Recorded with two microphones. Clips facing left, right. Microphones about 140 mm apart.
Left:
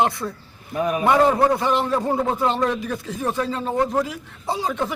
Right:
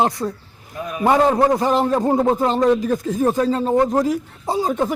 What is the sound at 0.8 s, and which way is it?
Speech, 65° left (ahead or behind).